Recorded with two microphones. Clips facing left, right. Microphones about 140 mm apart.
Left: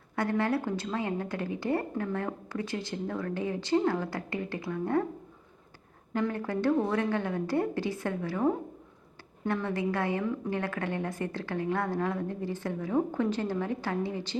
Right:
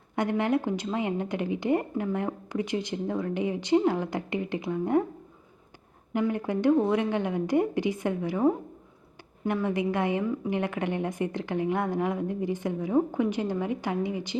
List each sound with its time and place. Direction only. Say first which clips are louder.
0.2 s a woman's voice: right 3 dB; 20° right (ahead or behind)
6.1 s a woman's voice: right 3 dB; 15° right (ahead or behind)